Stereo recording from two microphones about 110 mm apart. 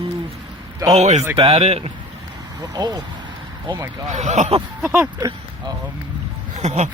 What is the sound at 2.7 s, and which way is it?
Speech, 35° right (ahead or behind).